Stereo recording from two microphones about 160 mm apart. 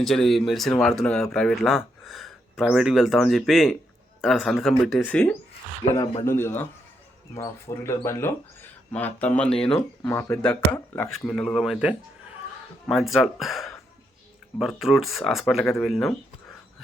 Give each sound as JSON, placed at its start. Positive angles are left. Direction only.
{"t": 0.0, "sound": "speech", "side_deg": 0}
{"t": 5.8, "sound": "speech", "side_deg": 25}
{"t": 10.8, "sound": "speech", "side_deg": 20}
{"t": 11.1, "sound": "speech", "side_deg": 5}